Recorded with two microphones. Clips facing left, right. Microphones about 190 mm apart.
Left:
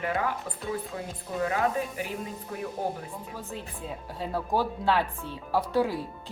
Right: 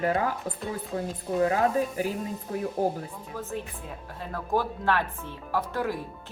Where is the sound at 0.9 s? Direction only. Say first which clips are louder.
Right 5 dB; 35° right (ahead or behind).